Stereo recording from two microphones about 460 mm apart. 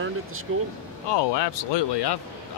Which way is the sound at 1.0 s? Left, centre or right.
Left.